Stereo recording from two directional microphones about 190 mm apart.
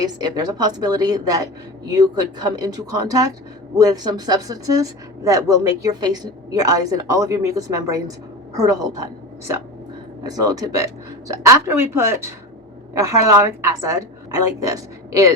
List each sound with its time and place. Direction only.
0.0 s a woman's voice: 20° right (ahead or behind)
10.2 s a woman's voice: 20° right (ahead or behind)